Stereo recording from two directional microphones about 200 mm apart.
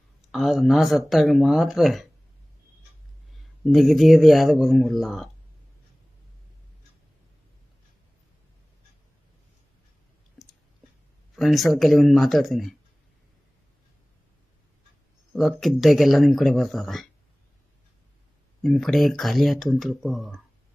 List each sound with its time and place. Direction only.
0.3 s speech: centre (ahead or behind)
3.6 s speech: centre (ahead or behind)
11.3 s speech: centre (ahead or behind)
15.3 s speech: centre (ahead or behind)
18.6 s speech: centre (ahead or behind)